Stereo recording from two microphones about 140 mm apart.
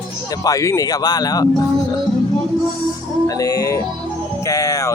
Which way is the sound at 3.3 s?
25° left (ahead or behind).